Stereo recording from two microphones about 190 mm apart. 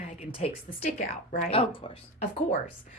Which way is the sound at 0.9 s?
50° left (ahead or behind).